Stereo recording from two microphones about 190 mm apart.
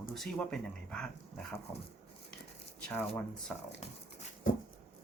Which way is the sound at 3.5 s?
5° left (ahead or behind).